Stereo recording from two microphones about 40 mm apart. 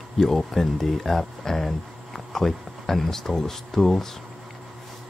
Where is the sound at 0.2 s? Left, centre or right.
Centre.